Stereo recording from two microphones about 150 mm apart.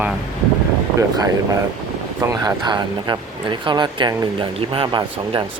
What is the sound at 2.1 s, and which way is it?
Speech, 25° right (ahead or behind).